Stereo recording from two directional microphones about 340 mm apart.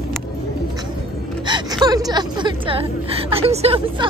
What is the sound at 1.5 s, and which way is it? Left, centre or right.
A woman's voice, centre.